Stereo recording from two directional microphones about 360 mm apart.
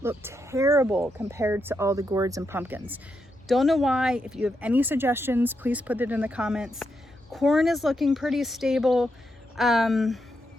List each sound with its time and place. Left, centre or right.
0.0 s speech: centre